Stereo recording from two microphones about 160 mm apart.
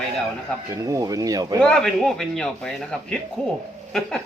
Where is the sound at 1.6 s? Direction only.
5° left (ahead or behind).